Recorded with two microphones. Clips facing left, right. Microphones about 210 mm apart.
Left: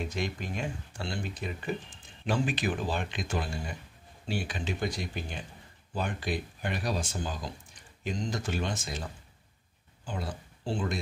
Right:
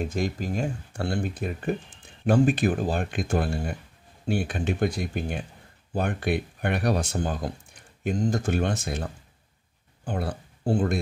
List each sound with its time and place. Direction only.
0.0 s speech: 45° right (ahead or behind)
0.9 s speech: 55° right (ahead or behind)